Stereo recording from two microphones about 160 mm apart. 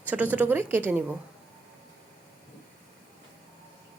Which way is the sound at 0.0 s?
10° right (ahead or behind).